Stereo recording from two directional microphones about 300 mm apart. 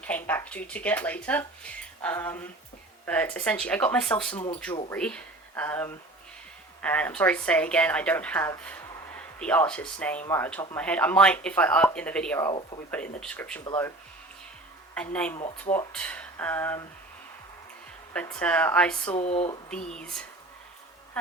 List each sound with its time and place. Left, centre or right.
0.3 s speech: centre
12.9 s speech: centre
14.9 s speech: centre
18.1 s speech: centre
19.1 s speech: left
19.9 s speech: centre